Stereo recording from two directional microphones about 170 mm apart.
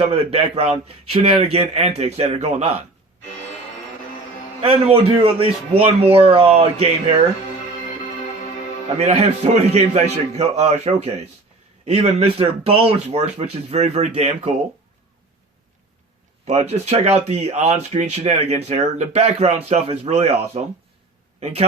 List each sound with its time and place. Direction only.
0.1 s speech: 35° right (ahead or behind)
4.6 s speech: 35° right (ahead or behind)
9.0 s speech: 40° right (ahead or behind)
16.5 s speech: 40° right (ahead or behind)